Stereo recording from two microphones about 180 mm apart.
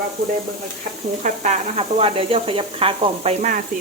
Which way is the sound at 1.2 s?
40° right (ahead or behind).